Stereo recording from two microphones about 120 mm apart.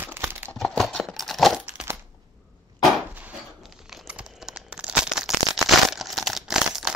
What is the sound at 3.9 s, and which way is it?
Tearing, 5° right (ahead or behind).